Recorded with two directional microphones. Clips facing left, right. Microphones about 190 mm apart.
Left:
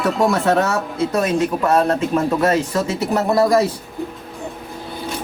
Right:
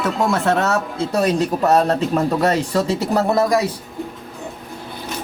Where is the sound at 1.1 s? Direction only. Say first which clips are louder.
Right 2 dB; 35° right (ahead or behind).